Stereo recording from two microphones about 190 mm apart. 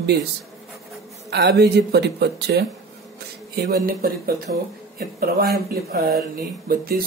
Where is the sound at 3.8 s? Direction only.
50° right (ahead or behind).